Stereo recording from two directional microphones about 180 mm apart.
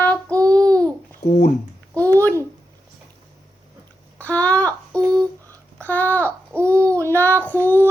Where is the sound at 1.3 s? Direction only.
40° left (ahead or behind).